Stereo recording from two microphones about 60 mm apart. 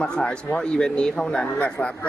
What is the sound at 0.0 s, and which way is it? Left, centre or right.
Speech, centre.